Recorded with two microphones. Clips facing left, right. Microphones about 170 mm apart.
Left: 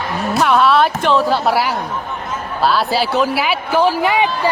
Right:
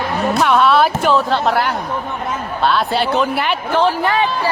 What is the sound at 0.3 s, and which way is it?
A woman's voice, centre (ahead or behind).